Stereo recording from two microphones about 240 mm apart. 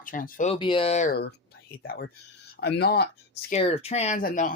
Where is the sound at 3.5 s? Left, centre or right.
Left.